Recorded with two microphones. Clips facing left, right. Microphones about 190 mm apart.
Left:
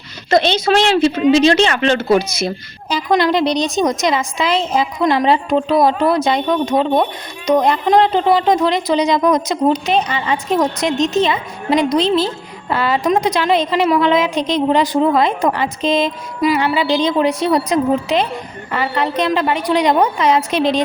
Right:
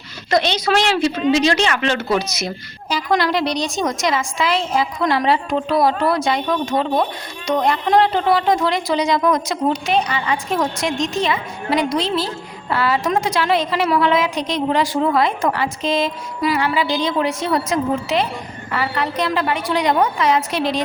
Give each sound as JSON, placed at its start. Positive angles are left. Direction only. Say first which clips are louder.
{"t": 0.3, "sound": "speech", "louder": "left 4 dB", "side_deg": 25}